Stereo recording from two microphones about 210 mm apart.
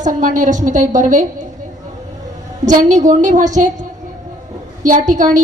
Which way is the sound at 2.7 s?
35° right (ahead or behind).